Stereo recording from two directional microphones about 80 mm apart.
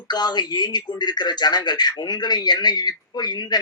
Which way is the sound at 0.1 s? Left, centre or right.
Left.